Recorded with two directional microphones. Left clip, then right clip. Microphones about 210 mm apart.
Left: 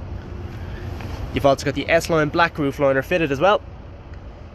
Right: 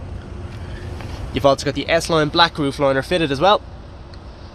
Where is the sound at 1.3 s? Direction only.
5° right (ahead or behind).